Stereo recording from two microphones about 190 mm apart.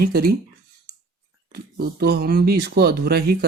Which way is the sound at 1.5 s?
55° right (ahead or behind).